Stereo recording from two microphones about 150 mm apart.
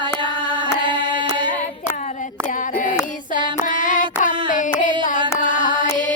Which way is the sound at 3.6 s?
60° left (ahead or behind).